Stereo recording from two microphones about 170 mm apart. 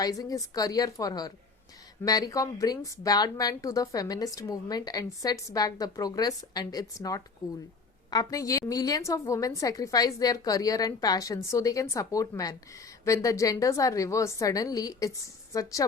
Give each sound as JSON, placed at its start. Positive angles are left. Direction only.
{"t": 0.0, "sound": "a woman's voice", "side_deg": 20}